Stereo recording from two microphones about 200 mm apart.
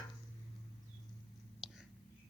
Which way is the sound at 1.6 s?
Centre (ahead or behind).